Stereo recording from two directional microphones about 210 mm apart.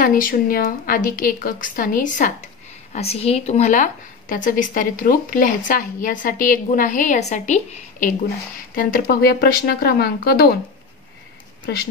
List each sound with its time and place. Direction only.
0.0 s a woman's voice: 40° left (ahead or behind)
8.7 s speech: 45° left (ahead or behind)
11.6 s speech: 45° left (ahead or behind)